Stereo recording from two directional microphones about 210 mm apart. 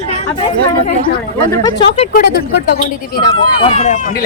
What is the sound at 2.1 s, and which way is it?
Speech, 50° left (ahead or behind).